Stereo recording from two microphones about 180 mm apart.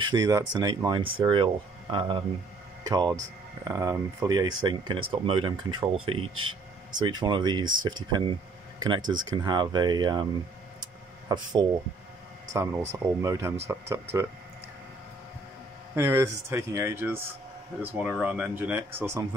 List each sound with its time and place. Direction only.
0.0 s speech: 20° right (ahead or behind)
10.8 s a sound: 25° right (ahead or behind)
12.6 s speech: 20° right (ahead or behind)
15.9 s speech: 15° right (ahead or behind)